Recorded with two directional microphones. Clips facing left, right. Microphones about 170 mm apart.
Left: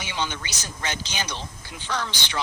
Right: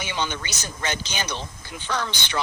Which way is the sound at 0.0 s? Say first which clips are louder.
Right 2 dB; 55° right (ahead or behind).